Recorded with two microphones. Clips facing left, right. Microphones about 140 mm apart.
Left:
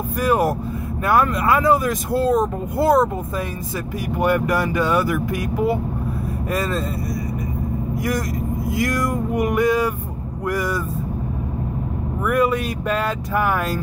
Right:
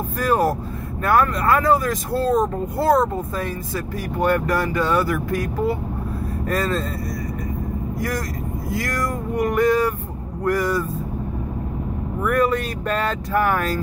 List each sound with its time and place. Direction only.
0.2 s speech: 15° left (ahead or behind)
8.7 s speech: 15° left (ahead or behind)
12.3 s speech: 10° left (ahead or behind)